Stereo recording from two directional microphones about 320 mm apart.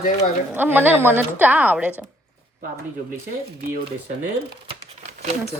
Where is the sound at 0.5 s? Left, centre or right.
Centre.